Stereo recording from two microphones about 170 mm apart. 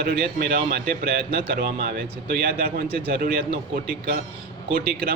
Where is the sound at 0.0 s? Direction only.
65° right (ahead or behind).